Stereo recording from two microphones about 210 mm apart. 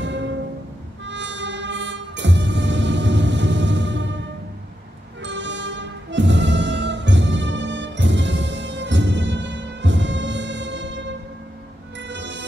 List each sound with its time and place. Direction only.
0.0 s music: 60° right (ahead or behind)